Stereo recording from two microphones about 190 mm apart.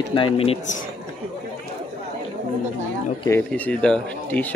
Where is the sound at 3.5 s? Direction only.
5° left (ahead or behind).